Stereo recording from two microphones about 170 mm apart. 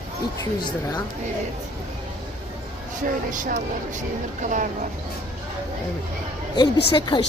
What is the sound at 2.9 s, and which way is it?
Speech, 50° right (ahead or behind).